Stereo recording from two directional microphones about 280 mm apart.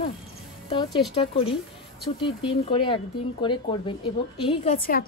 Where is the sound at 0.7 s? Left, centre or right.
Centre.